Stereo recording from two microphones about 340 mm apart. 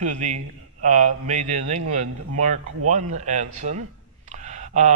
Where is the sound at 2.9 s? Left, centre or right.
Right.